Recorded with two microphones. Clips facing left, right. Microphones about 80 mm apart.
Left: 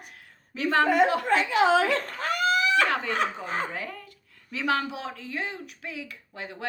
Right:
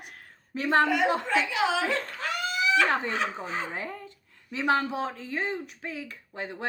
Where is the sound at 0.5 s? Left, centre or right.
Right.